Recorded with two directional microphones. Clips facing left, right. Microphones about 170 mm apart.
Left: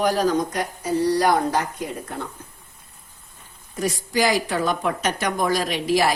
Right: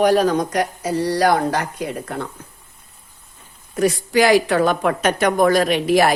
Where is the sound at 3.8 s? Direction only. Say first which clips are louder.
Right 6 dB; 65° right (ahead or behind).